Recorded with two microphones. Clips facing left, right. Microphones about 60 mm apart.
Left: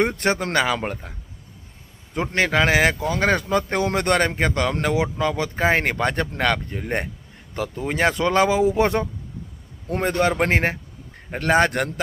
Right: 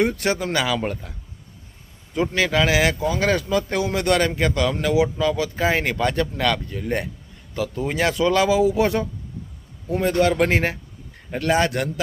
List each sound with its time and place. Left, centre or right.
0.0 s speech: left
2.3 s speech: left